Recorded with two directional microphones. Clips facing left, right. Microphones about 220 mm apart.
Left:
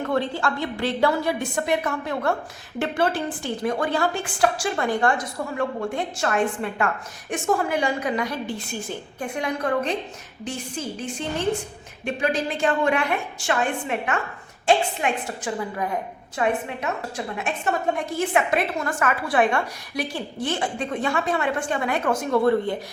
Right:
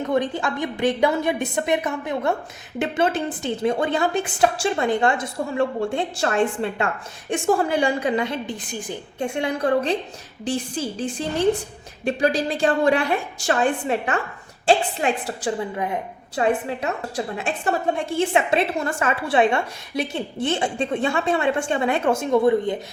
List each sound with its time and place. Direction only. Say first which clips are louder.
0.0 s a woman's voice: right 2 dB; 20° right (ahead or behind)
9.2 s a woman's voice: right 4 dB; 30° right (ahead or behind)
16.3 s a woman's voice: right 3 dB; 30° right (ahead or behind)